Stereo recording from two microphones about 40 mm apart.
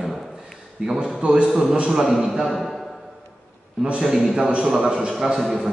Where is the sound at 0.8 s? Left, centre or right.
Right; by 2.7 s centre.